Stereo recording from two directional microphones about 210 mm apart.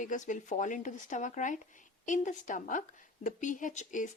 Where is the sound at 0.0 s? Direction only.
35° left (ahead or behind).